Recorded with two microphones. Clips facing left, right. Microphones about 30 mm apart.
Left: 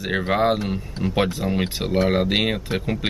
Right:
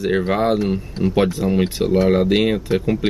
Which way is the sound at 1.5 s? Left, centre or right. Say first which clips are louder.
Right 5 dB; centre.